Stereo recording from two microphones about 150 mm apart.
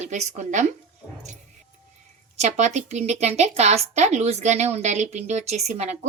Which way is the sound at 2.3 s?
50° right (ahead or behind).